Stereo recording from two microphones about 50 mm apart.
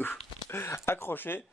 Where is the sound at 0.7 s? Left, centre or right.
Left.